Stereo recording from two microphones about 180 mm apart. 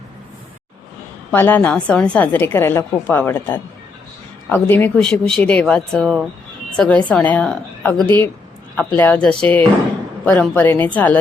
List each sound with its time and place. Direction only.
1.3 s a woman's voice: 10° left (ahead or behind)